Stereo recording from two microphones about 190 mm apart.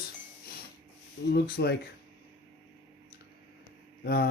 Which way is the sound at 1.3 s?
55° left (ahead or behind).